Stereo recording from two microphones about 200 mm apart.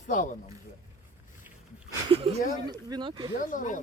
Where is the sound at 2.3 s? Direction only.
30° right (ahead or behind).